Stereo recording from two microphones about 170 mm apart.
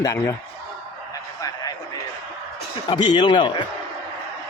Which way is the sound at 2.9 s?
25° left (ahead or behind).